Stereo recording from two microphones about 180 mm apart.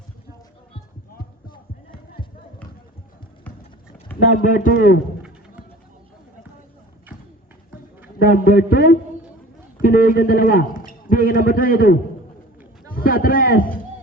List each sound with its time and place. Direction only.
4.4 s a man's voice: 50° left (ahead or behind)
8.2 s a man's voice: 50° left (ahead or behind)